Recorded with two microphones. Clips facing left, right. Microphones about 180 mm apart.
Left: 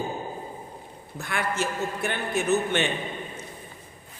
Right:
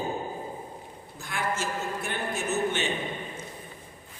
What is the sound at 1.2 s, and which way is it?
Speech, 65° left (ahead or behind).